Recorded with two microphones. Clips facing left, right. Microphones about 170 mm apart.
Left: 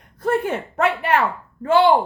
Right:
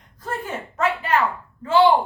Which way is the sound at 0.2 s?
65° left (ahead or behind).